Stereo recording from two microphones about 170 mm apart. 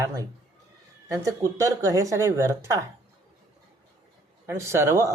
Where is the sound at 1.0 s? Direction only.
15° right (ahead or behind).